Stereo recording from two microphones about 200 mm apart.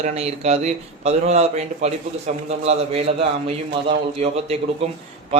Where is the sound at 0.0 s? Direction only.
30° right (ahead or behind).